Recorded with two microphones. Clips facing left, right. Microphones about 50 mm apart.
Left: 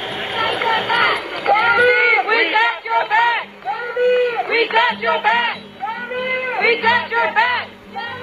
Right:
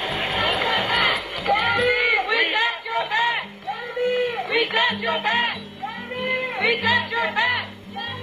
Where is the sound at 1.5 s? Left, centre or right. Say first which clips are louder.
Left 6 dB; left.